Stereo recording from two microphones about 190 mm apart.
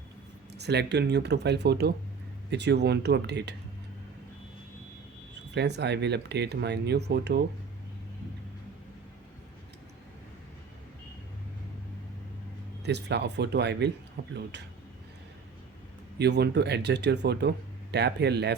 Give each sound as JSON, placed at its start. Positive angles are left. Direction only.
{"t": 0.5, "sound": "speech", "side_deg": -60}
{"t": 5.5, "sound": "speech", "side_deg": -60}
{"t": 12.8, "sound": "speech", "side_deg": -65}
{"t": 16.1, "sound": "speech", "side_deg": -60}